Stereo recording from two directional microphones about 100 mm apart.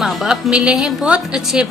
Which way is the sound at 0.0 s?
Centre (ahead or behind).